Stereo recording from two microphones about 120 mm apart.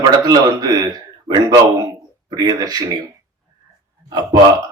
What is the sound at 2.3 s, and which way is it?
Speech, 35° right (ahead or behind).